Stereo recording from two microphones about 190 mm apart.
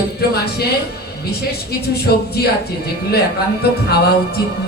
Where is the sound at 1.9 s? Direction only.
55° left (ahead or behind).